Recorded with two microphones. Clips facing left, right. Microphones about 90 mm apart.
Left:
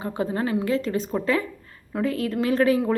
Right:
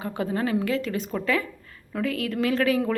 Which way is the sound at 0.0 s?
25° left (ahead or behind).